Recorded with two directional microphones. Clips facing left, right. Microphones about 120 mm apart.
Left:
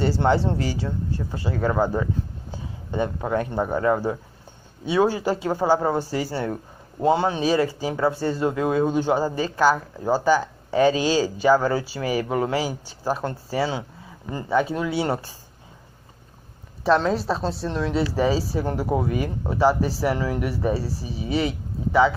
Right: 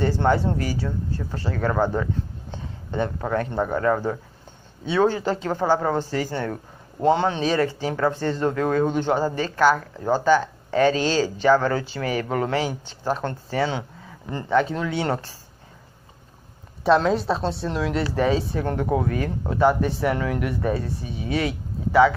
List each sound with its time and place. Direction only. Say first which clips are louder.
0.2 s speech: even; 20° left (ahead or behind)
16.8 s speech: right 1 dB; centre (ahead or behind)